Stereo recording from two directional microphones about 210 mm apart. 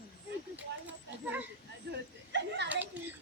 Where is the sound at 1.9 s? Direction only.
55° right (ahead or behind).